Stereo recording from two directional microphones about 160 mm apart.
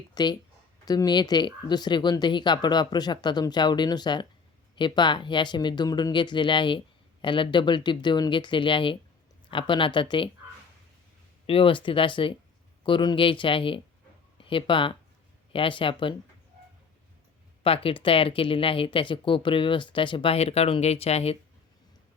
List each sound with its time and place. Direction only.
0.1 s speech: 25° left (ahead or behind)
11.4 s speech: 35° left (ahead or behind)
17.6 s speech: 35° left (ahead or behind)